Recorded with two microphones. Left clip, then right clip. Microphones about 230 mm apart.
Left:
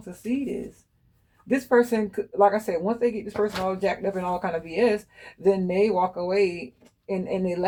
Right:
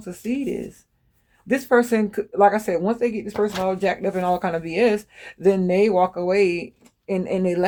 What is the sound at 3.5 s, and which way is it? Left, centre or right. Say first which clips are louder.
Speech: right 4 dB; right.